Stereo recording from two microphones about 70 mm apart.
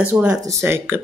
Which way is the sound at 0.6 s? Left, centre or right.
Right.